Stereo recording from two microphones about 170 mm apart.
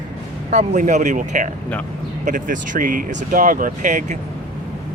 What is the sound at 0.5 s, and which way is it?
Speech, 45° right (ahead or behind).